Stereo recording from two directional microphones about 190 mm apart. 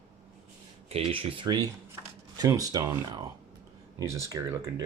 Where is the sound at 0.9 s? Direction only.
30° right (ahead or behind).